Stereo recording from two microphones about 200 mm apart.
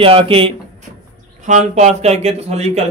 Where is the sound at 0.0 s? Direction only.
25° right (ahead or behind).